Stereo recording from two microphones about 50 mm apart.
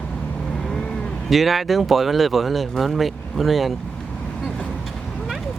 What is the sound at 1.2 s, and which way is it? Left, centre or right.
Speech, centre.